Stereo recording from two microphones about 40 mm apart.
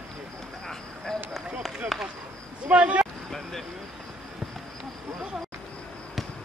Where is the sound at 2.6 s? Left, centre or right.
Right.